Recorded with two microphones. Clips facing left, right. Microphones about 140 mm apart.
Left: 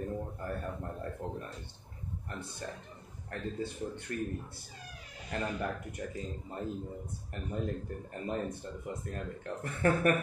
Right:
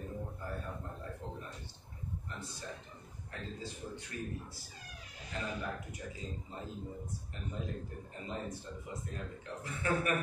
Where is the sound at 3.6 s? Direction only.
60° left (ahead or behind).